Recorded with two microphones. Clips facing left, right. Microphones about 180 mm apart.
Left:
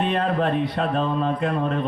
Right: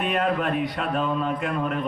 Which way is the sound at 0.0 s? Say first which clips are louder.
Left 2 dB; 30° left (ahead or behind).